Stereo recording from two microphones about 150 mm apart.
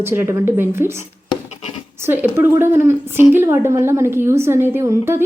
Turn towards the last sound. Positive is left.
turn(degrees=-15)  # may be behind; listen again after turning